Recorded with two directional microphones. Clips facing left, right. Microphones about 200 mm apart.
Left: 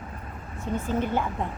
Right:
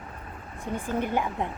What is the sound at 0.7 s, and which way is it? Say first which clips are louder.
Speech: left 1 dB; 15° right (ahead or behind).